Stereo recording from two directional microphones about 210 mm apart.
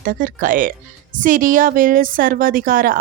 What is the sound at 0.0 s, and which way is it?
A woman's voice, 40° right (ahead or behind).